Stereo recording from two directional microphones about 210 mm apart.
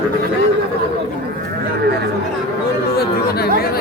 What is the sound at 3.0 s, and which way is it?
Chatter, 50° left (ahead or behind).